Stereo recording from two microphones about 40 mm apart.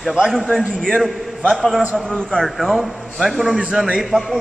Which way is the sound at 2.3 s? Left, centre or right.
Centre.